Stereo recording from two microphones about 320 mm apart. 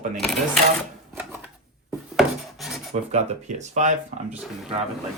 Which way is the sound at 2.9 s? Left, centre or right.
Right.